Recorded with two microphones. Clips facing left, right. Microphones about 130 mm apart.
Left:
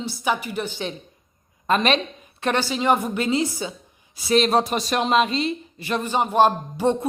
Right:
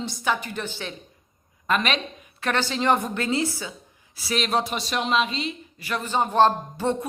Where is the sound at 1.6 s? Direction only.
35° left (ahead or behind).